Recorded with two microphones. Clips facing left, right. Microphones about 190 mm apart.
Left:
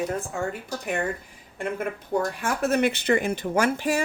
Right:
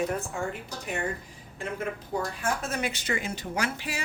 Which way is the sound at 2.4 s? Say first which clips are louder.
Left 7 dB; 65° left (ahead or behind).